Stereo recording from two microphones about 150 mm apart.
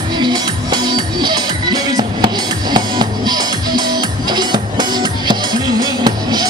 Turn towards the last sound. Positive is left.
turn(degrees=-25)  # may be behind; listen again after turning